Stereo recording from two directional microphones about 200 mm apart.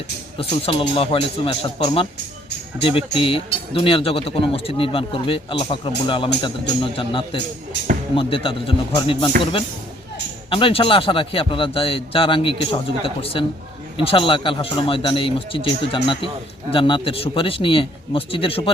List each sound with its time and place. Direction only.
0.3 s speech: 30° left (ahead or behind)